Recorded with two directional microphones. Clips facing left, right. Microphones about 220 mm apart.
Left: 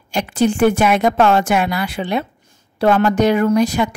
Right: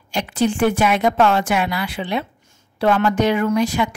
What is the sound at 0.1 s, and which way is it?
A woman's voice, 45° left (ahead or behind).